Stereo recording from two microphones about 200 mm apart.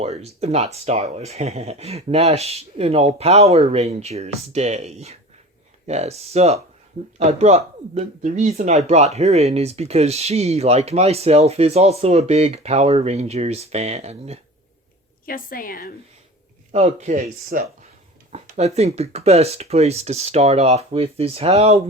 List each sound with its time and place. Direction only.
0.0 s speech: 30° right (ahead or behind)
15.3 s a woman's voice: 45° left (ahead or behind)
16.7 s speech: 35° right (ahead or behind)
17.5 s speech: 45° right (ahead or behind)
18.3 s speech: 35° right (ahead or behind)